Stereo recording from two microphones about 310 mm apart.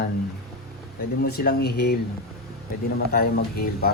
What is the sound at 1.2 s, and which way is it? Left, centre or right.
Speech, left.